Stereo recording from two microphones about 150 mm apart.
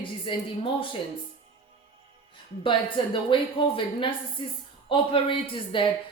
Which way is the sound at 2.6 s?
35° left (ahead or behind).